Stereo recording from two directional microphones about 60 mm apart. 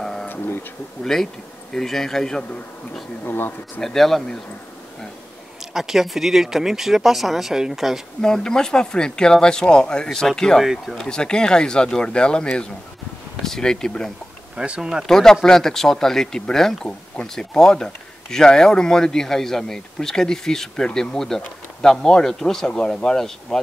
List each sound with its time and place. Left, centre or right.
0.0 s bee: centre
0.3 s speech: left
1.0 s speech: centre
3.3 s speech: left
3.8 s speech: centre
5.7 s speech: centre
8.2 s speech: centre
10.6 s speech: centre
11.1 s speech: centre
14.6 s speech: centre
15.0 s speech: centre